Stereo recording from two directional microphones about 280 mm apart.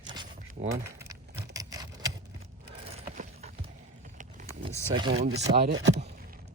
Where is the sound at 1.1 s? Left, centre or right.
Centre.